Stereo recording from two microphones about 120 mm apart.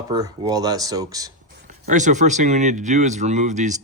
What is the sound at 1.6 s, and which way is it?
Speech, 90° right.